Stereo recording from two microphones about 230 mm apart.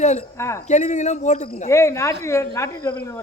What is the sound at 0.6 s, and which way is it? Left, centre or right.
Speech, left.